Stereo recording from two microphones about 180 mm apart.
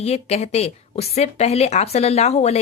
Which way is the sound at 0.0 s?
35° left (ahead or behind).